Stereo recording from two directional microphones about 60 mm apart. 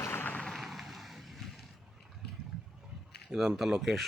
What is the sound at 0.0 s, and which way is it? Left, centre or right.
Vehicle, left.